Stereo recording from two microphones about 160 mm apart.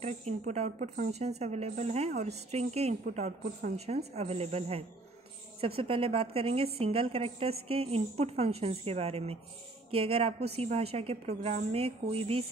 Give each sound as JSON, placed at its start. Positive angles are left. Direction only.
{"t": 0.0, "sound": "a woman's voice", "side_deg": -45}